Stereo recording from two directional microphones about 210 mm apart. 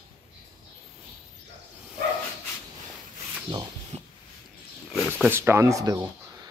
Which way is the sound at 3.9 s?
30° right (ahead or behind).